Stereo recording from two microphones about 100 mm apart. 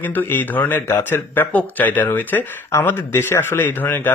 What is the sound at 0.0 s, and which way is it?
Speech, 20° left (ahead or behind).